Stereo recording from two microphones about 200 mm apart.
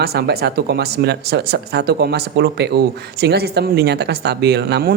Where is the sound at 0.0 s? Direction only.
55° right (ahead or behind).